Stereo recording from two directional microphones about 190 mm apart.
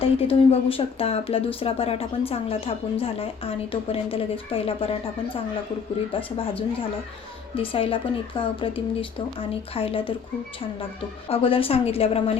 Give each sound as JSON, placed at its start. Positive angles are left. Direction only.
{"t": 0.0, "sound": "speech", "side_deg": 30}
{"t": 11.3, "sound": "speech", "side_deg": 30}